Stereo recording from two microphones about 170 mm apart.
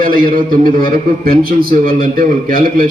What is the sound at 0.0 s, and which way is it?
A man's voice, 55° right (ahead or behind).